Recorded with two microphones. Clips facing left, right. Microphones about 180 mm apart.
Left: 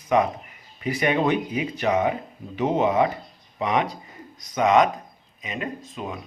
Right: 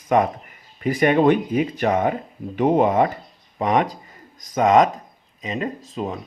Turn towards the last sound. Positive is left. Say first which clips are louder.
# right 5 dB
turn(degrees=-35)  # may be behind; listen again after turning